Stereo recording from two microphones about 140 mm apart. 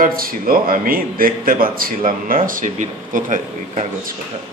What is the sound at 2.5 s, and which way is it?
Speech, 70° right (ahead or behind).